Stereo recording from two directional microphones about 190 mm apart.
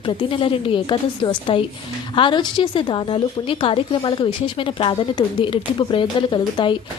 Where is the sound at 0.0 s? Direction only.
25° left (ahead or behind).